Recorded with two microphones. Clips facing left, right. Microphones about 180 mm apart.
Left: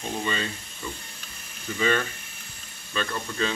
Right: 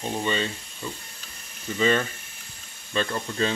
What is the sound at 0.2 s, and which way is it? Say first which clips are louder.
Speech: right 3 dB; 30° right (ahead or behind).